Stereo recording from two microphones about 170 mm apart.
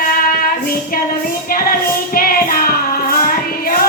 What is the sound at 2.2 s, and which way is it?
Music, 60° left (ahead or behind).